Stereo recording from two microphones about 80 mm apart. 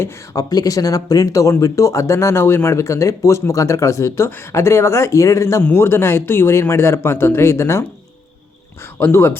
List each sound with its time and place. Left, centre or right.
0.3 s speech: left